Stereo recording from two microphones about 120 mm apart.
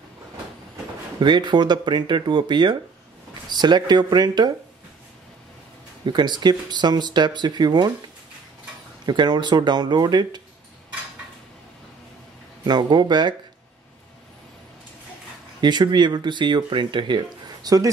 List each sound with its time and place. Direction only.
1.2 s speech: 40° right (ahead or behind)
6.0 s speech: 35° right (ahead or behind)
9.0 s speech: 35° right (ahead or behind)
12.6 s speech: 35° right (ahead or behind)
15.6 s speech: 35° right (ahead or behind)